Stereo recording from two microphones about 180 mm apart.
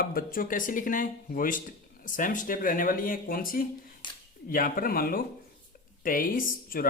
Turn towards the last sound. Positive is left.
turn(degrees=50)  # may be behind; listen again after turning